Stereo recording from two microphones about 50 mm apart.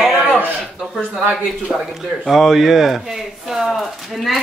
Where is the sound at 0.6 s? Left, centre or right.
Centre.